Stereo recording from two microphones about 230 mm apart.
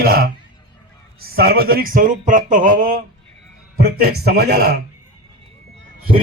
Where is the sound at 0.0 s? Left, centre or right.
Right.